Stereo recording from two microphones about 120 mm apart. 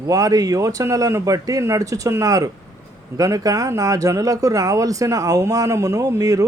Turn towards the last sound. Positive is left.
turn(degrees=-30)  # may be behind; listen again after turning